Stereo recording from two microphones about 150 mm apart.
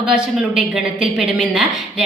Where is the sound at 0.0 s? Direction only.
5° right (ahead or behind).